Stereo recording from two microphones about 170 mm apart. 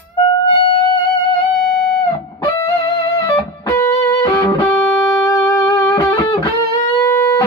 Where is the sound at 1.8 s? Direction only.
25° left (ahead or behind).